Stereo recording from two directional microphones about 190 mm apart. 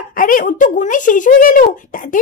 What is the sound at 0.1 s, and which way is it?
Speech, 45° left (ahead or behind).